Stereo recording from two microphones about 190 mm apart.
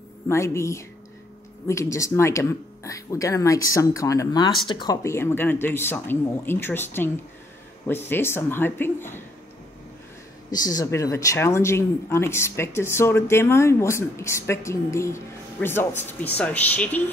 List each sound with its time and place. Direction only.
0.3 s speech: 15° left (ahead or behind)
10.5 s speech: 20° left (ahead or behind)